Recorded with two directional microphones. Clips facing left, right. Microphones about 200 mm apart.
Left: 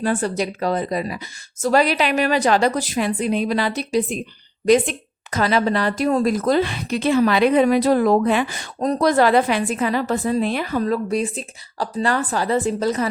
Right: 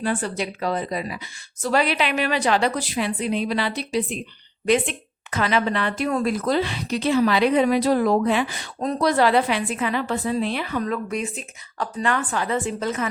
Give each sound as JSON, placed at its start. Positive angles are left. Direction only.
{"t": 0.0, "sound": "a woman's voice", "side_deg": 40}